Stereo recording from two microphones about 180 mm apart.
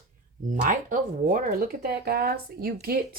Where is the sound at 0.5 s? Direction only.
45° right (ahead or behind).